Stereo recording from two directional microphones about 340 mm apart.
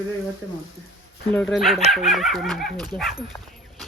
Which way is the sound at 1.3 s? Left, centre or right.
Centre.